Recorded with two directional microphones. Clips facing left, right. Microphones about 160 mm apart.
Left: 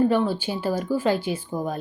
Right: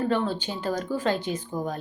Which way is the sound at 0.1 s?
5° left (ahead or behind).